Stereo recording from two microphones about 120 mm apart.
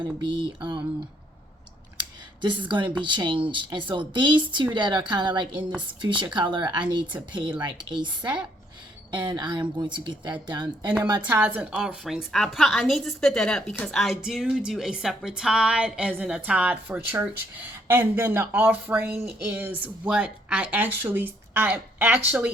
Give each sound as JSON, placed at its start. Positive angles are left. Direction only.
{"t": 0.3, "sound": "mantra", "side_deg": -40}
{"t": 2.4, "sound": "speech", "side_deg": -40}
{"t": 8.2, "sound": "a woman's voice", "side_deg": -10}
{"t": 9.1, "sound": "speech", "side_deg": -40}
{"t": 11.1, "sound": "a woman's voice", "side_deg": -15}
{"t": 12.0, "sound": "a woman's voice", "side_deg": 0}